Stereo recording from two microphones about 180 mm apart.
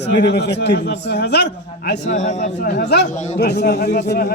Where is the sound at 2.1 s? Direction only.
40° left (ahead or behind).